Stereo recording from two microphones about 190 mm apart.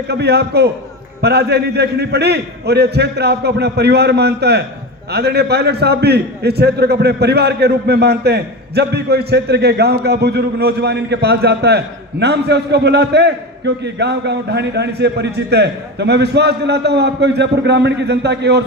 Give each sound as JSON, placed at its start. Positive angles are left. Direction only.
{"t": 0.1, "sound": "a man's voice", "side_deg": -60}